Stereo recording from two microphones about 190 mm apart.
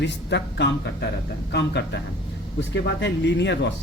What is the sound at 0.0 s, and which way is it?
Speech, 65° left (ahead or behind).